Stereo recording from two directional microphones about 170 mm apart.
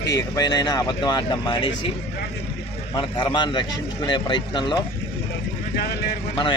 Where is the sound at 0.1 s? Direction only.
20° left (ahead or behind).